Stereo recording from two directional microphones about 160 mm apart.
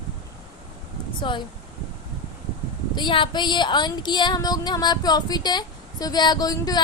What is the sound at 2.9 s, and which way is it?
Speech, 30° left (ahead or behind).